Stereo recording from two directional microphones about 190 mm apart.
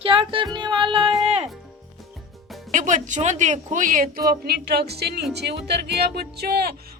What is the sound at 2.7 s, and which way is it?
Music, 40° right (ahead or behind).